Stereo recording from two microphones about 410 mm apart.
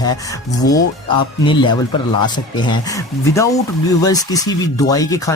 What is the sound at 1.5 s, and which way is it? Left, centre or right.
Speech, centre.